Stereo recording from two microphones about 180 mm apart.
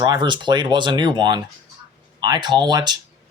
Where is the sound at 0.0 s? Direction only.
25° right (ahead or behind).